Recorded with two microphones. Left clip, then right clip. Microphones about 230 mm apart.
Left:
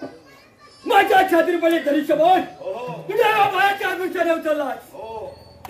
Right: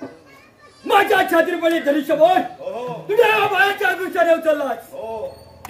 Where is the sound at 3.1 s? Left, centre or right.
Centre.